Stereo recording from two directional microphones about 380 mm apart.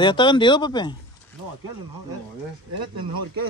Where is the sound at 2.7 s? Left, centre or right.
Right.